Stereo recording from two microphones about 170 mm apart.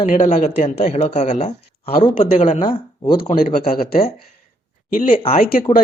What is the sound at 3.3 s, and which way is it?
Speech, 60° left (ahead or behind).